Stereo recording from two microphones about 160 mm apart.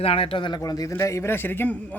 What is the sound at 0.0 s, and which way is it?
A man's voice, 35° left (ahead or behind).